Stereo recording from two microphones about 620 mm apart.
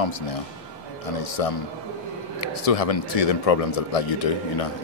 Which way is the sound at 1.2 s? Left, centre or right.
Left.